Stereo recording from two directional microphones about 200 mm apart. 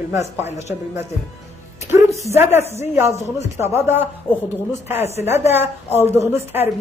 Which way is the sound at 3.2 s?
35° left (ahead or behind).